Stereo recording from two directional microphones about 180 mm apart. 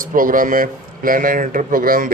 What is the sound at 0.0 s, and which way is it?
A man's voice, 50° right (ahead or behind).